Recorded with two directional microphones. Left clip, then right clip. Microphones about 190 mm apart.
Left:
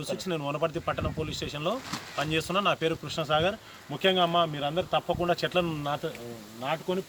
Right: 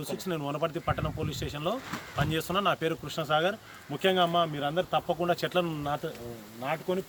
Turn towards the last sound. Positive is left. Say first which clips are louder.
# left 1 dB
turn(degrees=-5)  # may be behind; listen again after turning